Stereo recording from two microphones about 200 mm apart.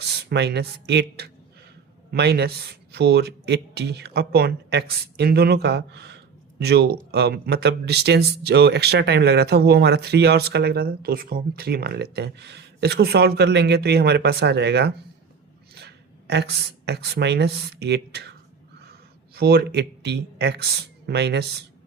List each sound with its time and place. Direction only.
0.3 s speech: 55° right (ahead or behind)